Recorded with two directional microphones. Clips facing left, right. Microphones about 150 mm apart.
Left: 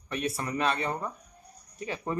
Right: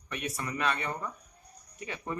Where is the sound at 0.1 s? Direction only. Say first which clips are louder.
Left 5 dB; 30° left (ahead or behind).